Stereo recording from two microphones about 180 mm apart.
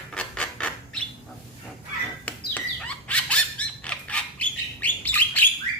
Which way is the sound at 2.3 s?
10° left (ahead or behind).